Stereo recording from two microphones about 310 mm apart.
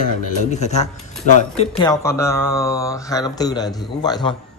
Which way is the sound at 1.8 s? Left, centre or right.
Centre.